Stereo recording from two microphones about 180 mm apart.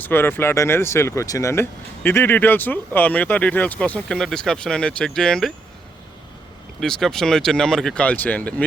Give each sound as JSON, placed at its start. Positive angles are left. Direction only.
{"t": 0.0, "sound": "speech", "side_deg": 10}
{"t": 6.7, "sound": "speech", "side_deg": 0}